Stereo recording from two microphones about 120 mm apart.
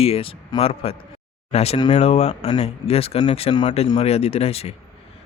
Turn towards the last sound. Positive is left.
turn(degrees=55)  # may be behind; listen again after turning